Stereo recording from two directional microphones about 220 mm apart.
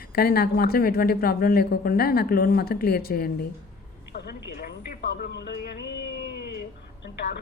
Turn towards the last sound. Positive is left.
turn(degrees=50)  # may be behind; listen again after turning